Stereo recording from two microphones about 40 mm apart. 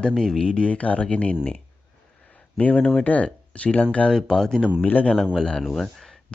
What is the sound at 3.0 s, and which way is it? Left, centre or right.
Speech, left.